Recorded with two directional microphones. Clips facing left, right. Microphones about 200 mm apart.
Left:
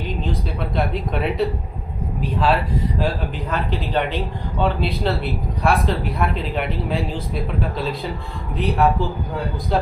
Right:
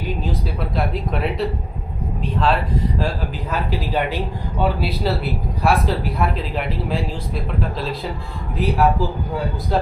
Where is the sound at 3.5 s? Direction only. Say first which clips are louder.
Even; 5° right (ahead or behind).